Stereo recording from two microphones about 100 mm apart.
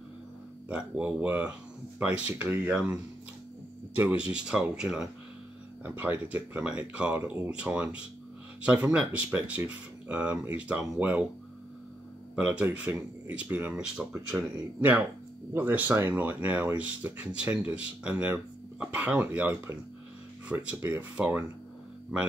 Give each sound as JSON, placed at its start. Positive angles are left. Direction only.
{"t": 0.7, "sound": "speech", "side_deg": -10}
{"t": 3.9, "sound": "speech", "side_deg": -20}
{"t": 12.4, "sound": "speech", "side_deg": -10}